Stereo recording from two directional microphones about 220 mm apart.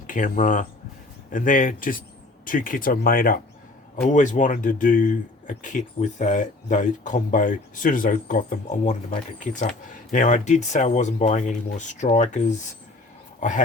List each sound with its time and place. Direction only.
0.1 s speech: 35° left (ahead or behind)